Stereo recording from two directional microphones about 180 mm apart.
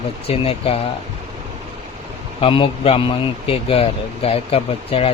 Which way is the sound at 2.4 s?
30° left (ahead or behind).